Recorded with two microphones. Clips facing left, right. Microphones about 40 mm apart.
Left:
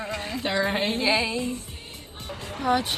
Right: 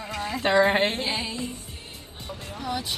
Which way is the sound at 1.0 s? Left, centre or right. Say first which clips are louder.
Left 5 dB; left.